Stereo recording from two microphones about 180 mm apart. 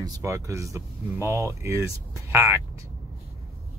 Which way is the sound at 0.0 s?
15° right (ahead or behind).